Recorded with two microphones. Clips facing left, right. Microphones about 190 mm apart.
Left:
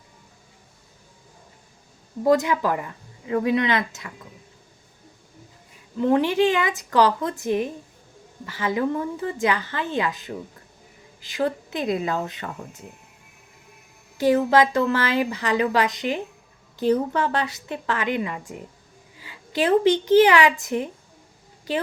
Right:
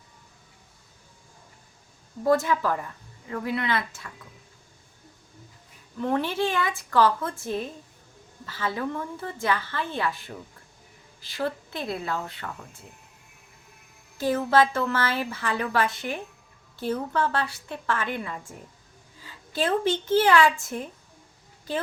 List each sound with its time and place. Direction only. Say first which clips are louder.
2.2 s speech: left 3 dB; 15° left (ahead or behind)
6.0 s speech: left 7 dB; 15° left (ahead or behind)
14.2 s speech: left 4 dB; 15° left (ahead or behind)